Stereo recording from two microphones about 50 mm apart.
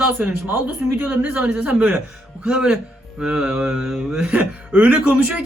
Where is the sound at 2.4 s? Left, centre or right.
Centre.